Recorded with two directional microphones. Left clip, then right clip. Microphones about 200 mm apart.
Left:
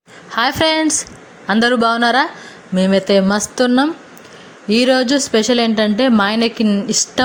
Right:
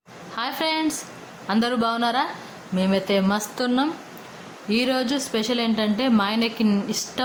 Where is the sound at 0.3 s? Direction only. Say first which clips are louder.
Left 10 dB; 35° left (ahead or behind).